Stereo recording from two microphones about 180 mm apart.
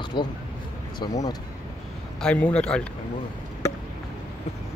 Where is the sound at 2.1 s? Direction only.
5° left (ahead or behind).